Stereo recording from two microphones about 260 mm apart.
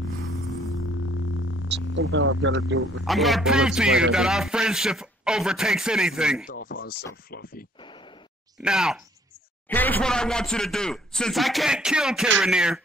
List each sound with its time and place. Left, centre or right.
0.9 s music: left
2.0 s speech: right
3.1 s a man's voice: centre
6.4 s speech: left
8.5 s a man's voice: centre